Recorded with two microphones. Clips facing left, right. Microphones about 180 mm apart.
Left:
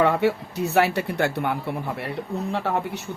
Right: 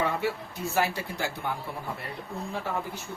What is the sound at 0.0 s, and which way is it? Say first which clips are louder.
Speech: left 8 dB; 65° left (ahead or behind).